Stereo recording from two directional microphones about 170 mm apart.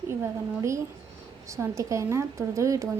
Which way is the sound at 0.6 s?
15° right (ahead or behind).